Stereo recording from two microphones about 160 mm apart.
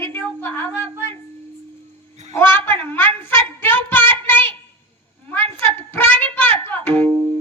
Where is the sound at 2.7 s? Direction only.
15° left (ahead or behind).